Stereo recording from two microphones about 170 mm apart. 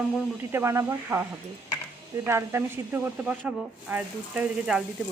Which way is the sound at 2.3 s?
15° right (ahead or behind).